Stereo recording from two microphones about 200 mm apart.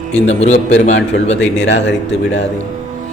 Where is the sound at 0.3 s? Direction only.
35° left (ahead or behind).